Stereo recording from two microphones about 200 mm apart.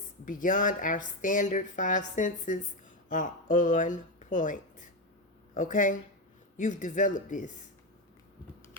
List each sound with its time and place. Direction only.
0.3 s speech: 40° left (ahead or behind)